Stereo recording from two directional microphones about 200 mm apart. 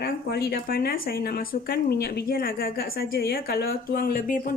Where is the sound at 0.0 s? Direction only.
50° left (ahead or behind).